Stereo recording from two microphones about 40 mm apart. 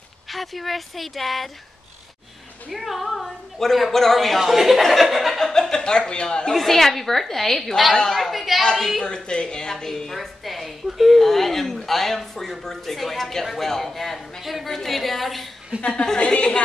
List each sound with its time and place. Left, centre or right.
0.3 s a woman's voice: centre
2.7 s a woman's voice: centre
4.4 s a woman's voice: centre
5.4 s speech: centre
6.5 s a woman's voice: centre
8.1 s a sound: centre
8.7 s a woman's voice: centre
9.0 s a woman's voice: left; by 15.5 s centre
15.7 s a woman's voice: right
16.2 s a woman's voice: left